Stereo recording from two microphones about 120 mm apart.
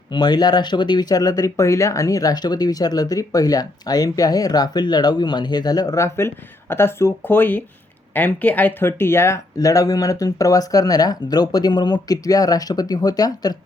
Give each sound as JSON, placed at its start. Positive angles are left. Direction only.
{"t": 0.1, "sound": "speech", "side_deg": 35}